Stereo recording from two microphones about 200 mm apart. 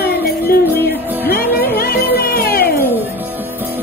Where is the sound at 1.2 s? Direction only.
50° left (ahead or behind).